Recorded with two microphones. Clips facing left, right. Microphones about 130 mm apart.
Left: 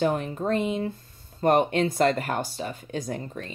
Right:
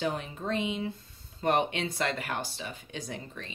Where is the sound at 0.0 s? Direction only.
50° left (ahead or behind).